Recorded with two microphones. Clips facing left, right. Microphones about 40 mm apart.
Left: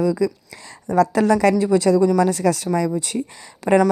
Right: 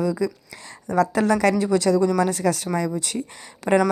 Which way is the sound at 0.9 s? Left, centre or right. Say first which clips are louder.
Left 3 dB; right.